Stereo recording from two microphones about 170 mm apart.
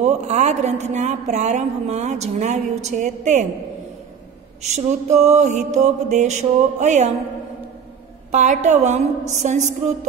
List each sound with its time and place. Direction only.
0.0 s a woman's voice: 40° right (ahead or behind)
4.6 s a woman's voice: 40° right (ahead or behind)
8.3 s a woman's voice: 45° right (ahead or behind)